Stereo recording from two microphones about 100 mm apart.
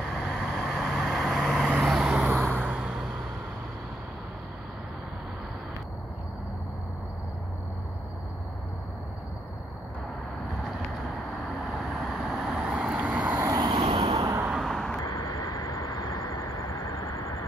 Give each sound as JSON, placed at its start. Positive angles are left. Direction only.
{"t": 0.0, "sound": "vehicle", "side_deg": 0}
{"t": 2.2, "sound": "vehicle", "side_deg": -15}
{"t": 11.8, "sound": "vehicle", "side_deg": 0}
{"t": 13.5, "sound": "vehicle", "side_deg": -45}
{"t": 13.8, "sound": "vehicle", "side_deg": -55}
{"t": 14.1, "sound": "vehicle", "side_deg": -40}
{"t": 14.5, "sound": "vehicle", "side_deg": 0}
{"t": 15.0, "sound": "vehicle", "side_deg": 40}